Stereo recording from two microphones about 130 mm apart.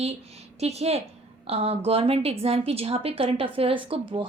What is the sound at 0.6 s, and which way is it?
A woman's voice, 55° right (ahead or behind).